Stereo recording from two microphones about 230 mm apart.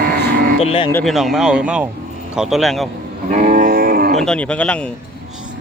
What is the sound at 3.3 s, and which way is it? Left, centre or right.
Cattle, right.